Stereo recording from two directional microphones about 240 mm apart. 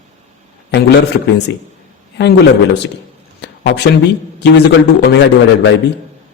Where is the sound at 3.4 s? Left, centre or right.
Left.